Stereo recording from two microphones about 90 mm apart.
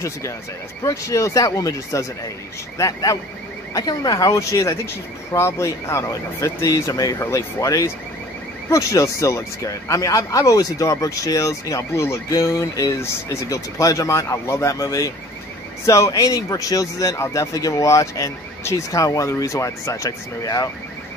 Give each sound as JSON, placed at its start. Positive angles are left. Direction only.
{"t": 0.8, "sound": "speech", "side_deg": 35}